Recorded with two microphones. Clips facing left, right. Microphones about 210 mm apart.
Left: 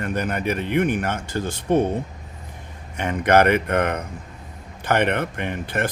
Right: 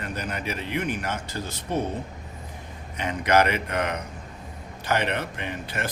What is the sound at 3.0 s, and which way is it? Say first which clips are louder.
Speech: left 4 dB; 55° left (ahead or behind).